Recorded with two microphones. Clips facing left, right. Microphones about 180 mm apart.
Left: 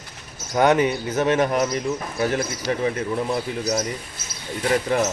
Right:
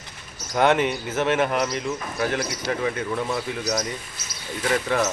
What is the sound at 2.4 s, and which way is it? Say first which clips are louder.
Speech: left 2 dB; 30° left (ahead or behind).